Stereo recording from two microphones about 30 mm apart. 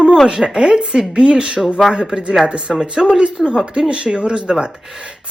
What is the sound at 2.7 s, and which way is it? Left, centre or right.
Speech, right.